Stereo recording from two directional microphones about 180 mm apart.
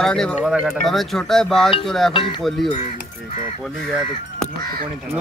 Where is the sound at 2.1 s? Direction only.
25° left (ahead or behind).